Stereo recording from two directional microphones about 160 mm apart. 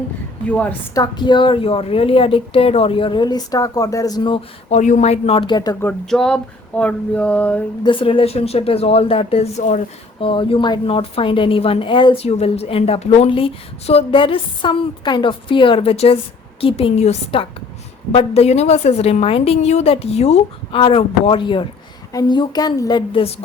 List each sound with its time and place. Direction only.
0.4 s a sound: 10° left (ahead or behind)
0.9 s a woman's voice: 30° left (ahead or behind)
4.7 s a woman's voice: 50° left (ahead or behind); by 5.7 s 25° left (ahead or behind)
6.1 s a sound: 5° left (ahead or behind)
7.9 s a woman's voice: 35° left (ahead or behind)
10.2 s a woman's voice: 35° left (ahead or behind)